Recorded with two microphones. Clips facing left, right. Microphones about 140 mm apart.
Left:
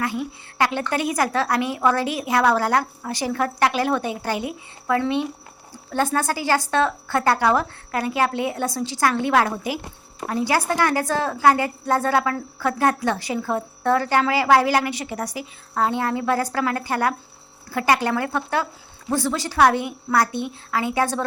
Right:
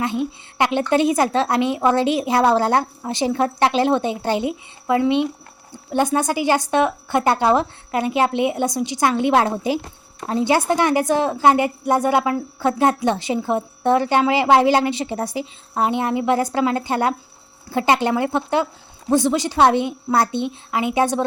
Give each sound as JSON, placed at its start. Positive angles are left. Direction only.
{"t": 0.0, "sound": "a woman's voice", "side_deg": -20}